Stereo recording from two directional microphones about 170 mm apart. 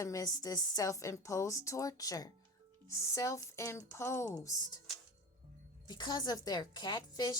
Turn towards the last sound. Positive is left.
turn(degrees=25)  # may be behind; listen again after turning